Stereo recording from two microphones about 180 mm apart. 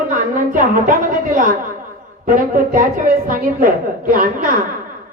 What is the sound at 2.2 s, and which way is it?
A woman's voice, 45° right (ahead or behind).